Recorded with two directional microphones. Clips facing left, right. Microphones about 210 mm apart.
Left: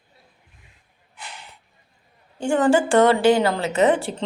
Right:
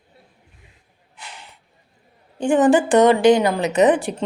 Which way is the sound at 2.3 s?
20° right (ahead or behind).